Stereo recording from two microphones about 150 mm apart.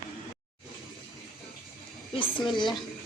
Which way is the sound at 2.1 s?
30° left (ahead or behind).